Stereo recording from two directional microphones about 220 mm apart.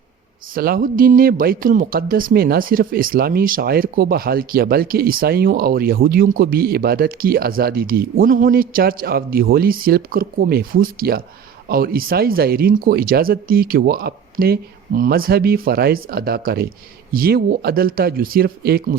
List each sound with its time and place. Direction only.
0.5 s speech: 40° right (ahead or behind)